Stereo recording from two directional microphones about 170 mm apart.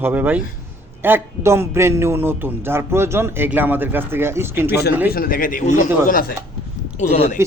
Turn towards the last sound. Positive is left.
turn(degrees=45)  # may be behind; listen again after turning